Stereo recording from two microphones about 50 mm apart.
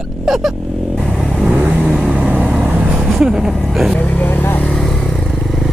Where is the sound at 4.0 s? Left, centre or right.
Left.